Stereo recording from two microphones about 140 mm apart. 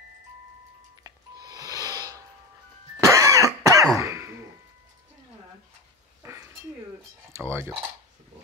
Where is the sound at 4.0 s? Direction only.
20° right (ahead or behind).